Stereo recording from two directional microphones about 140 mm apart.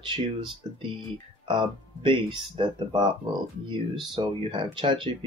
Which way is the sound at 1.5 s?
35° right (ahead or behind).